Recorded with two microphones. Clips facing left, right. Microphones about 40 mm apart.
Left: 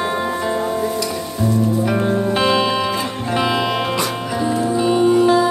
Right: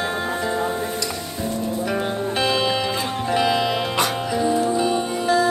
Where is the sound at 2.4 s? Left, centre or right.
Centre.